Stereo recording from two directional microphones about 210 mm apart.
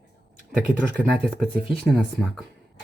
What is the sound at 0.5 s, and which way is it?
A man's voice, 5° right (ahead or behind).